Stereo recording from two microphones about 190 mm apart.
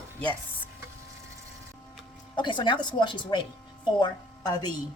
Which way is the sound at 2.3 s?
25° left (ahead or behind).